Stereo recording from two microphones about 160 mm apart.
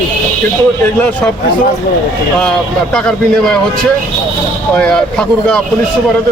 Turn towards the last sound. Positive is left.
turn(degrees=5)  # may be behind; listen again after turning